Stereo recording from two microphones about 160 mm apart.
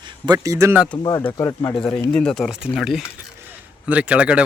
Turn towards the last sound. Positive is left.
turn(degrees=-5)  # may be behind; listen again after turning